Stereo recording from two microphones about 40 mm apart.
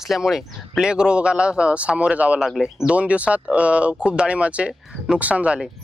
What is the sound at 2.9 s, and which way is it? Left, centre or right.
Speech, right.